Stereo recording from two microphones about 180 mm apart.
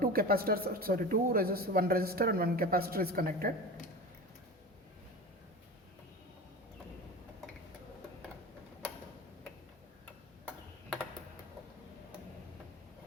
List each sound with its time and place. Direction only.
0.0 s speech: 55° right (ahead or behind)